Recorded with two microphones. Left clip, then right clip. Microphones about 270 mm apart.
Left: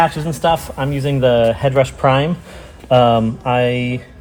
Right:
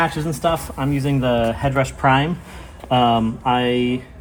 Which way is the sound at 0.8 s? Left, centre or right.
Left.